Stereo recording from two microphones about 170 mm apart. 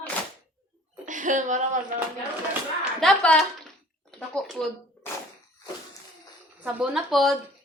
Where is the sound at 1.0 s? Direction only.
50° right (ahead or behind).